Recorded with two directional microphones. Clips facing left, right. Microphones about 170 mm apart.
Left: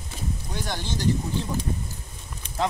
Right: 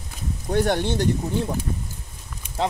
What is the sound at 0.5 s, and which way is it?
Speech, 60° right (ahead or behind).